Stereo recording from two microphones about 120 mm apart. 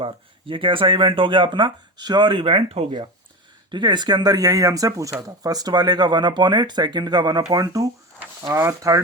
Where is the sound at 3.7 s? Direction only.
40° right (ahead or behind).